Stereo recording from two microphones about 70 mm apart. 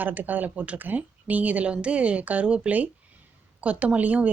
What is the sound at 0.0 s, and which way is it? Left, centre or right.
A woman's voice, right.